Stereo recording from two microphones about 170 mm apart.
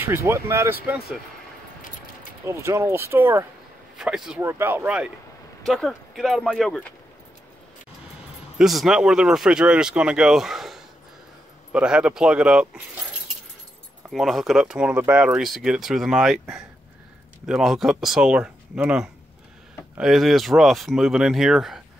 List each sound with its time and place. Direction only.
0.0 s speech: 15° right (ahead or behind)
2.4 s speech: 15° right (ahead or behind)
4.0 s speech: 5° right (ahead or behind)
4.4 s speech: 15° right (ahead or behind); by 6.9 s centre (ahead or behind)
8.5 s speech: centre (ahead or behind)
14.1 s speech: centre (ahead or behind)
17.5 s speech: centre (ahead or behind)